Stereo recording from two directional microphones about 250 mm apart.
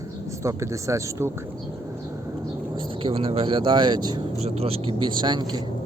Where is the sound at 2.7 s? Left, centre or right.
Right.